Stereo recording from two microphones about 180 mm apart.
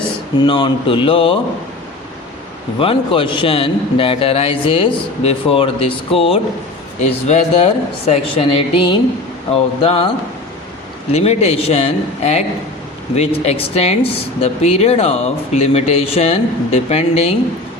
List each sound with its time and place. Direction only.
0.4 s speech: 25° left (ahead or behind)
2.7 s speech: 30° left (ahead or behind)
11.1 s speech: 35° left (ahead or behind)